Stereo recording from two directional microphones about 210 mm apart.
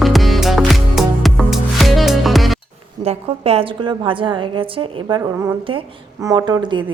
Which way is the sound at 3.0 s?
30° right (ahead or behind).